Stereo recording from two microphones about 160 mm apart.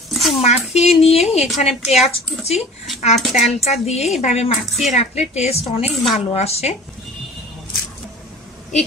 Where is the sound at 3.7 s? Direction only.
40° left (ahead or behind).